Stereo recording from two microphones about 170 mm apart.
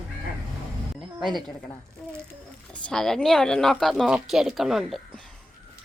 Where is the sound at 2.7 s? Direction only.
5° left (ahead or behind).